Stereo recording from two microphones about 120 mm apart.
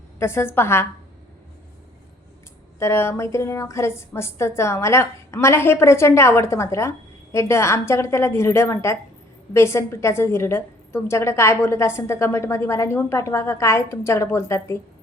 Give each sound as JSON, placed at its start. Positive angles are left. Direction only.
{"t": 0.2, "sound": "a woman's voice", "side_deg": 20}
{"t": 2.7, "sound": "a woman's voice", "side_deg": 20}